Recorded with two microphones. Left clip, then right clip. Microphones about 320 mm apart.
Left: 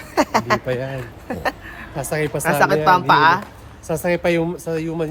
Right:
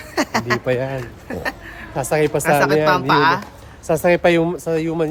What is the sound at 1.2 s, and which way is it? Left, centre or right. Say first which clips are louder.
Speech: left 3 dB; centre.